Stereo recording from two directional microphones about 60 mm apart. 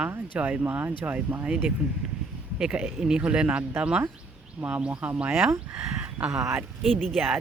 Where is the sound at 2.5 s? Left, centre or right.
Centre.